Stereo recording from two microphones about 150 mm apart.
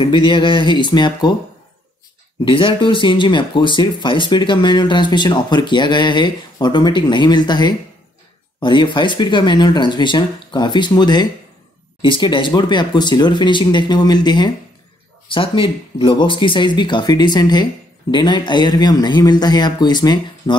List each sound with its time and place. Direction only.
0.0 s speech: 35° left (ahead or behind)
2.4 s speech: 35° left (ahead or behind)